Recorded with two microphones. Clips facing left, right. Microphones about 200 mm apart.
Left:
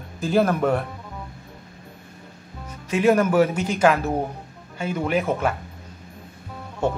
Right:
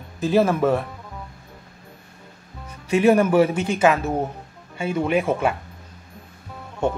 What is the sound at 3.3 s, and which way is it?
Speech, 30° right (ahead or behind).